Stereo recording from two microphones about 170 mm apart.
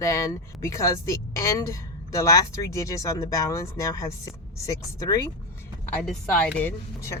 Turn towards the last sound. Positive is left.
turn(degrees=15)  # may be behind; listen again after turning